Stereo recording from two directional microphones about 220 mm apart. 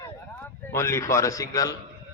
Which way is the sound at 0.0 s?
10° left (ahead or behind).